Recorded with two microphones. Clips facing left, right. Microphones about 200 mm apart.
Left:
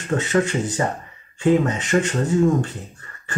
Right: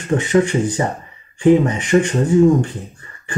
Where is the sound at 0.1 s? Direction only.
15° right (ahead or behind).